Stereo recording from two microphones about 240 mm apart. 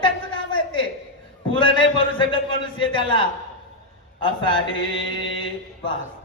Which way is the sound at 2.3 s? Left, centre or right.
Left.